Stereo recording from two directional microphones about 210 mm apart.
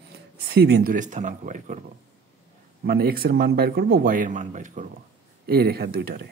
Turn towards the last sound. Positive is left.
turn(degrees=-50)  # may be behind; listen again after turning